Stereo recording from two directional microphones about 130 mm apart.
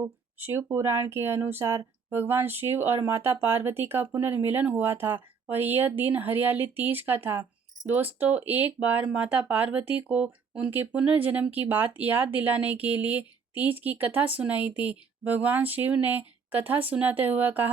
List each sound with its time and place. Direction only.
0.0 s speech: 15° right (ahead or behind)